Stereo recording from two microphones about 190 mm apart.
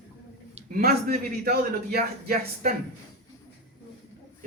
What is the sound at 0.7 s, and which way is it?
A man's voice, 50° right (ahead or behind).